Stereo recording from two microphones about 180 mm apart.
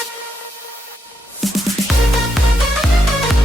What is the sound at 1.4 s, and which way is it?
Music, centre (ahead or behind).